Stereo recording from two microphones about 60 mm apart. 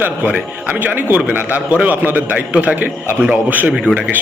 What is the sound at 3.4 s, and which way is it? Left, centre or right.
Speech, right.